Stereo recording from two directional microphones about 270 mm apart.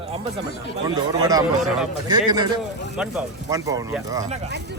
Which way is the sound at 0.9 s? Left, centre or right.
Centre.